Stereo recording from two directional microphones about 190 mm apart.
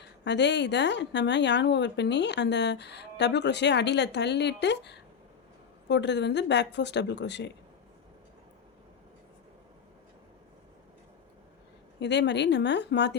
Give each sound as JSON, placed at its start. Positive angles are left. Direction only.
{"t": 0.0, "sound": "a woman's voice", "side_deg": 65}
{"t": 11.9, "sound": "a woman's voice", "side_deg": 65}